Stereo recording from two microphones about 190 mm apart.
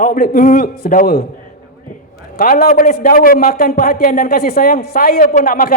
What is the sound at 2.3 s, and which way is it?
A man's voice, 50° left (ahead or behind).